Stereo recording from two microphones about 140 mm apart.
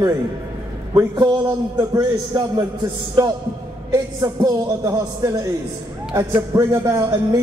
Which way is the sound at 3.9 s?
25° right (ahead or behind).